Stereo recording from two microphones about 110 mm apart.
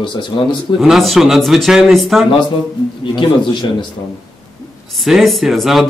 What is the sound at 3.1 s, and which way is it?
Speech, 45° left (ahead or behind).